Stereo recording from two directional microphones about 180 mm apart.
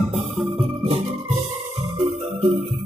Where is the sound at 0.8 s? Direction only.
35° right (ahead or behind).